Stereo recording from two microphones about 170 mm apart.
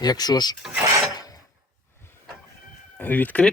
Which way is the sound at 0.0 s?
25° left (ahead or behind).